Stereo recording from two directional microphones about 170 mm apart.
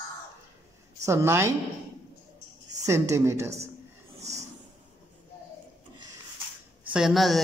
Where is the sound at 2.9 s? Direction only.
15° right (ahead or behind).